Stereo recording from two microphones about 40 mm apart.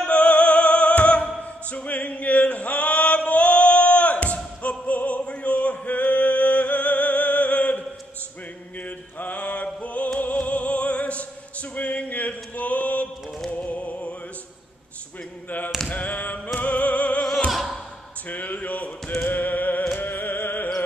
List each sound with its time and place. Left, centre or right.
0.0 s music: left
1.7 s male singing: left
4.6 s opera: left
8.8 s mantra: left
9.8 s music: left
11.7 s a sound: left
13.5 s music: left
15.9 s a capella: left
16.5 s opera: left
17.5 s music: centre
18.3 s a sound: left
19.9 s music: left